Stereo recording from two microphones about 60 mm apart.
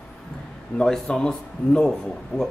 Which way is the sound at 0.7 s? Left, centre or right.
Centre.